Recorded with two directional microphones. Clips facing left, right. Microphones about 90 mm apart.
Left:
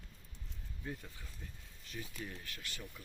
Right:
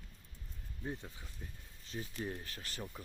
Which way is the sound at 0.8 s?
25° right (ahead or behind).